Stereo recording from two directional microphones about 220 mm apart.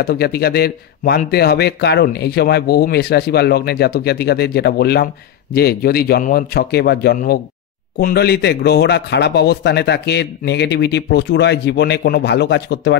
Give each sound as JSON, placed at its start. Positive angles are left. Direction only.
{"t": 0.0, "sound": "a man's voice", "side_deg": 45}